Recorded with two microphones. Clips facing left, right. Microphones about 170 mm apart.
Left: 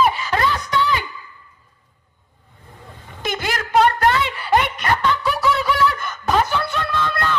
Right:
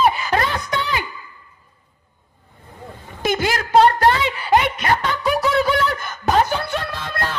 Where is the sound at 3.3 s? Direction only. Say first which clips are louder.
Right 4 dB; 45° right (ahead or behind).